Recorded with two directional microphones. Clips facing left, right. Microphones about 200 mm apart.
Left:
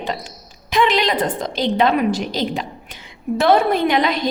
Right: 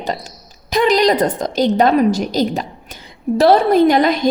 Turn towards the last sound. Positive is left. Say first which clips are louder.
# right 6 dB
turn(degrees=-45)  # may be behind; listen again after turning